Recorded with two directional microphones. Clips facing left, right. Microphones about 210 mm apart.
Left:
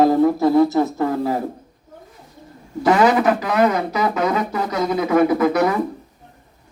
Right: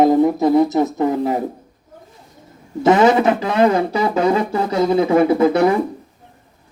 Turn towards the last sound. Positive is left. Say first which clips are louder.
# right 3 dB
turn(degrees=-30)  # may be behind; listen again after turning